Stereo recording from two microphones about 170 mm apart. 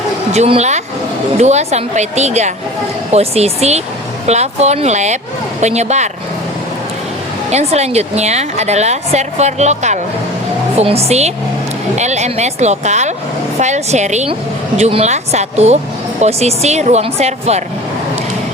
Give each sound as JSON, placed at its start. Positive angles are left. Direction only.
{"t": 0.3, "sound": "a woman's voice", "side_deg": -35}
{"t": 7.5, "sound": "a woman's voice", "side_deg": -40}